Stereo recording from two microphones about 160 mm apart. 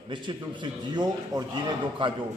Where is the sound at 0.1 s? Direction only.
30° right (ahead or behind).